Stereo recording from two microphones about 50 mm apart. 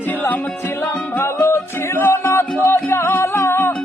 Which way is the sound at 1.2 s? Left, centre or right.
Left.